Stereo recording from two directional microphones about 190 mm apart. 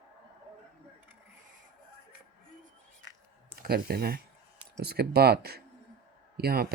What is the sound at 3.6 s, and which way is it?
A man's voice, 55° right (ahead or behind).